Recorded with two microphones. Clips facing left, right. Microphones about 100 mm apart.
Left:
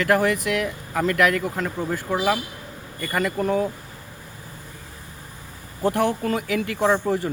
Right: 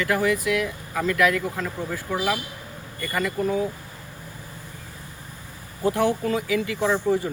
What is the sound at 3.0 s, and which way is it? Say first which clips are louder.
Speech: left 2 dB; 55° left (ahead or behind).